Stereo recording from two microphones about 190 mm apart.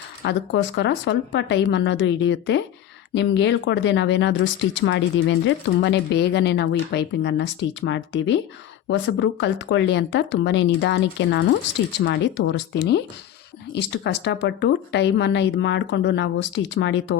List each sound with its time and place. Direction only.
0.3 s speech: 65° left (ahead or behind)